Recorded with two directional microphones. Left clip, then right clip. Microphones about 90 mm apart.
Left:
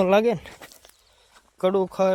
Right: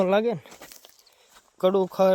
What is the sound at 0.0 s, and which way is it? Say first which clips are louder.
Speech: left 3 dB; 35° left (ahead or behind).